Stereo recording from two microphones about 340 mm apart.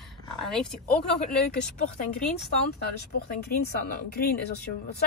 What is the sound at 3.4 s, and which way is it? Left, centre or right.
Speech, left.